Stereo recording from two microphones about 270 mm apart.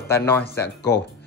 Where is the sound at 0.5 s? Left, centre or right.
Left.